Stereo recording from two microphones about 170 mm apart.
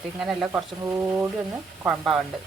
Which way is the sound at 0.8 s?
15° right (ahead or behind).